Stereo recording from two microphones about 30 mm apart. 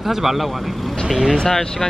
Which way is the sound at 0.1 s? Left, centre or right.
Centre.